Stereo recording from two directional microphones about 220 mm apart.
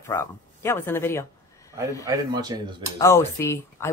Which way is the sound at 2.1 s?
20° right (ahead or behind).